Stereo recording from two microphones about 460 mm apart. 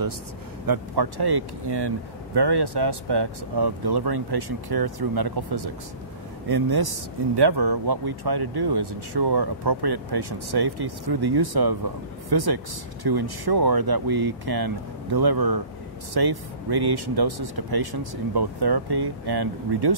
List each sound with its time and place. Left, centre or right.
0.7 s speech: right